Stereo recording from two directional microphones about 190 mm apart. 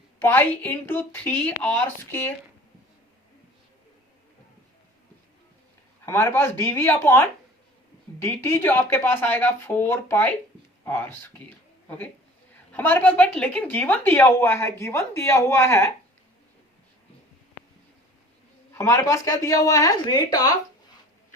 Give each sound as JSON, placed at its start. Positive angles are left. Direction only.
{"t": 0.2, "sound": "a woman's voice", "side_deg": 10}
{"t": 6.1, "sound": "a woman's voice", "side_deg": 15}
{"t": 12.7, "sound": "a woman's voice", "side_deg": 10}
{"t": 18.7, "sound": "a woman's voice", "side_deg": 15}